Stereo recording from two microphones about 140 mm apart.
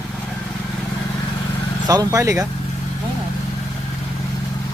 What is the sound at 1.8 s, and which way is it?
Speech, 25° right (ahead or behind).